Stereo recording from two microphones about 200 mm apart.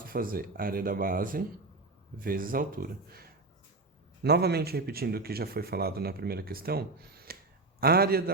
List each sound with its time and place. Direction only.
0.0 s speech: 45° right (ahead or behind)